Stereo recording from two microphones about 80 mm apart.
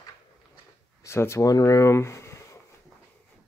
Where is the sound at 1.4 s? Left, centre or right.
Left.